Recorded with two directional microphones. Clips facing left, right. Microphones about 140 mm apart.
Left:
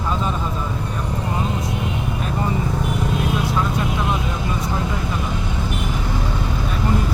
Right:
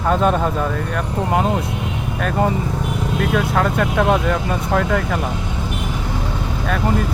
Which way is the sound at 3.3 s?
70° right (ahead or behind).